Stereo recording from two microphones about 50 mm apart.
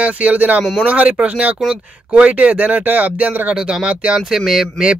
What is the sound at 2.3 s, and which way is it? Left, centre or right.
Speech, right.